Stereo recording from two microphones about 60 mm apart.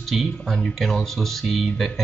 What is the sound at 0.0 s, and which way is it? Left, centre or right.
Speech, centre.